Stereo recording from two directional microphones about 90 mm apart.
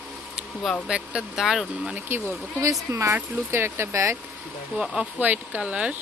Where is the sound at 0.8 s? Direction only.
10° right (ahead or behind).